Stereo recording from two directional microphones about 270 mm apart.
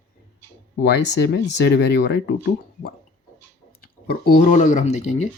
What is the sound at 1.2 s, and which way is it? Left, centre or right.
Speech, left.